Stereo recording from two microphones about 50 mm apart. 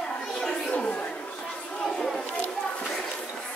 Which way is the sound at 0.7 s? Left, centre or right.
Left.